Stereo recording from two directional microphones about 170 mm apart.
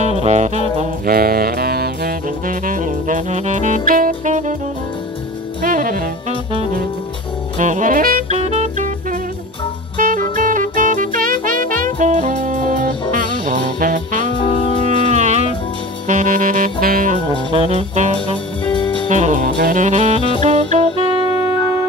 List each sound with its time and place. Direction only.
0.0 s music: 40° right (ahead or behind)
1.0 s saxophone: 60° right (ahead or behind); by 4.6 s 45° right (ahead or behind)
5.6 s saxophone: 55° right (ahead or behind)
7.5 s saxophone: 45° right (ahead or behind)
9.9 s music: 50° right (ahead or behind)
14.3 s saxophone: 30° left (ahead or behind)
15.0 s music: 45° right (ahead or behind)
16.1 s saxophone: 50° right (ahead or behind)
16.8 s music: 55° right (ahead or behind)
17.3 s saxophone: 35° right (ahead or behind)
18.7 s music: 30° left (ahead or behind)
19.0 s music: 45° right (ahead or behind)
19.5 s saxophone: 55° right (ahead or behind); by 21.1 s 35° right (ahead or behind)